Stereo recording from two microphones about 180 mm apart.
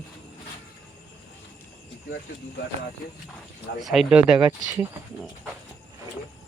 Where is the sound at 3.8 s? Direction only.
Centre (ahead or behind).